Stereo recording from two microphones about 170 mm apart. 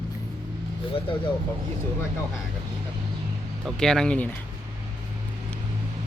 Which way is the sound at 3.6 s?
5° left (ahead or behind).